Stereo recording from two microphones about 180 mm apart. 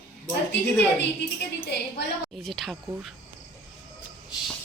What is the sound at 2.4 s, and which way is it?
Speech, centre (ahead or behind).